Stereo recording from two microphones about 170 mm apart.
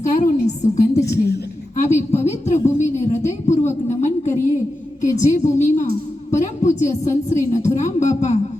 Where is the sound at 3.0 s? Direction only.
45° left (ahead or behind).